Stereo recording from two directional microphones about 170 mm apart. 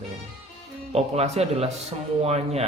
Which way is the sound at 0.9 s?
40° right (ahead or behind).